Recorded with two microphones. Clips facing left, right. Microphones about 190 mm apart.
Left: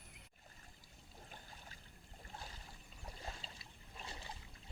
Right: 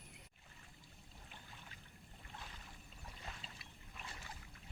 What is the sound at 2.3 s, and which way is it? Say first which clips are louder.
Boat: left 2 dB; 35° left (ahead or behind).